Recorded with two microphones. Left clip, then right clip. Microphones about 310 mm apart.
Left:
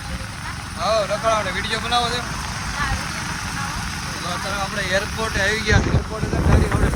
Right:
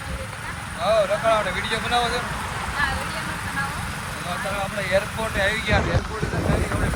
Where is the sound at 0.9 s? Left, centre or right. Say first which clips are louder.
Even; centre.